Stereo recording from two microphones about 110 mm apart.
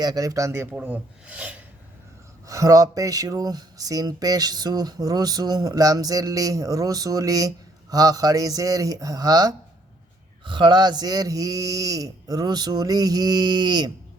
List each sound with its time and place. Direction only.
0.0 s speech: 35° right (ahead or behind); by 1.6 s 10° right (ahead or behind)
2.5 s speech: 30° right (ahead or behind)
10.4 s speech: 45° right (ahead or behind)